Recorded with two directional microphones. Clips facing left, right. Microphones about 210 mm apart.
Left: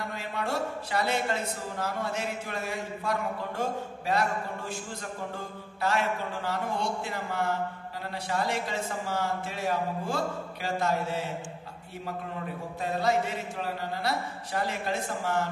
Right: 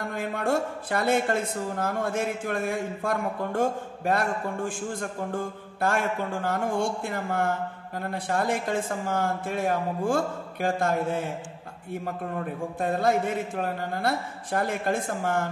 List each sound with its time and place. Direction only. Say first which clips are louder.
0.0 s a woman's voice: right 5 dB; 50° right (ahead or behind)
12.8 s a woman's voice: right 3 dB; 50° right (ahead or behind)